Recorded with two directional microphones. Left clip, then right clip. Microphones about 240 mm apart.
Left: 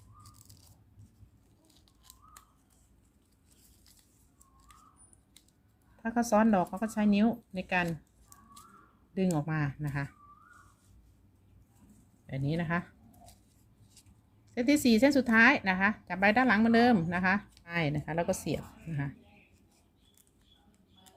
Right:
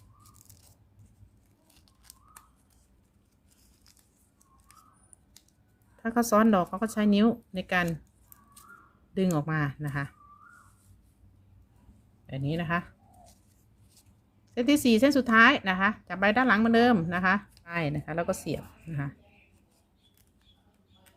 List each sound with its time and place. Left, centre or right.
6.0 s speech: centre
9.1 s speech: centre
12.2 s speech: centre
14.5 s speech: centre